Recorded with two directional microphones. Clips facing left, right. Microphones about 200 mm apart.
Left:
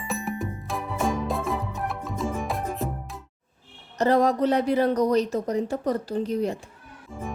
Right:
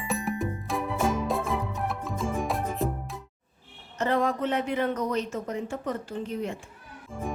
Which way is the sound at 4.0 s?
40° left (ahead or behind).